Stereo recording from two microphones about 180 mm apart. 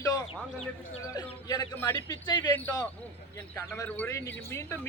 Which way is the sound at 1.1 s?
20° left (ahead or behind).